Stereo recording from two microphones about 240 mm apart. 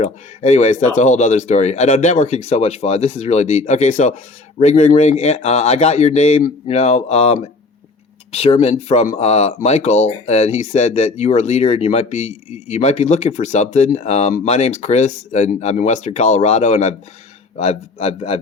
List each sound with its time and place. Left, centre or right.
0.0 s speech: left